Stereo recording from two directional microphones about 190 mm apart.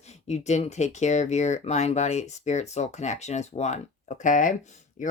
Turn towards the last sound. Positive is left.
turn(degrees=40)  # may be behind; listen again after turning